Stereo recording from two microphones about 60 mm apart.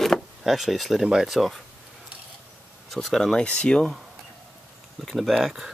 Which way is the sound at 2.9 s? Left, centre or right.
Centre.